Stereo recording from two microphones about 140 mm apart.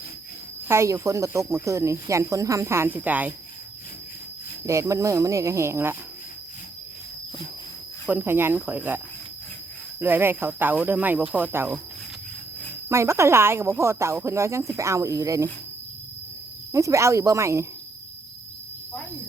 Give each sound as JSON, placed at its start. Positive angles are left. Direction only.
{"t": 0.7, "sound": "speech", "side_deg": -20}
{"t": 4.6, "sound": "speech", "side_deg": -20}
{"t": 8.0, "sound": "speech", "side_deg": -15}
{"t": 10.0, "sound": "speech", "side_deg": -15}
{"t": 12.9, "sound": "speech", "side_deg": -20}
{"t": 16.7, "sound": "speech", "side_deg": -20}